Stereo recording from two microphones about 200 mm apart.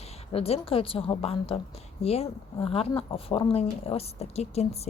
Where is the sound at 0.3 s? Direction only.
30° left (ahead or behind).